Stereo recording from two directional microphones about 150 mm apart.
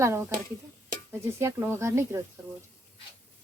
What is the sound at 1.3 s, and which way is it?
Speech, 15° right (ahead or behind).